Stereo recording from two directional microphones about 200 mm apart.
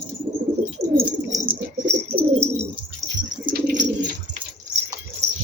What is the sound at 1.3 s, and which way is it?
Bird, 25° right (ahead or behind).